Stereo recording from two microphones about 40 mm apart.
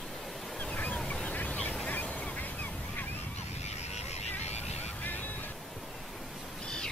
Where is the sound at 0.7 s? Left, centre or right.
Left.